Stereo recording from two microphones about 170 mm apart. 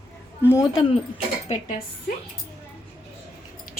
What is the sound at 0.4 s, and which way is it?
Speech, 15° left (ahead or behind).